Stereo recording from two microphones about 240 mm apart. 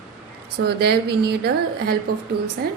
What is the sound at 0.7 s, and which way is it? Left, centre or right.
A woman's voice, right.